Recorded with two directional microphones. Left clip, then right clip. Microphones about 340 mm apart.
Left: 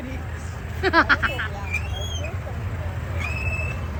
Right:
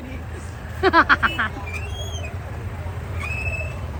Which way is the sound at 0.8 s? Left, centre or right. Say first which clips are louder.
Right 3 dB; centre.